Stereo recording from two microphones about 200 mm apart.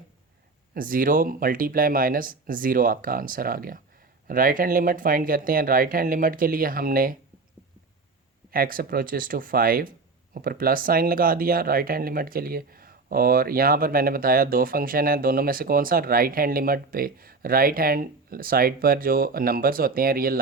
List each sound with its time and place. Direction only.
0.7 s speech: 45° right (ahead or behind)
8.5 s speech: 45° right (ahead or behind)